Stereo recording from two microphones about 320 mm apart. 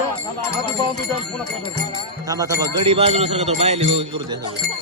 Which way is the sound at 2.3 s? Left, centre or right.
Centre.